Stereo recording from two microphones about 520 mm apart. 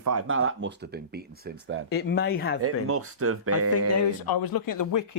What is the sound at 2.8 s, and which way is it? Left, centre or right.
Speech, right.